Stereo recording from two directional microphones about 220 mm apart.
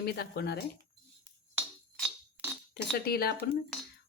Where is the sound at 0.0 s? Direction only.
45° left (ahead or behind).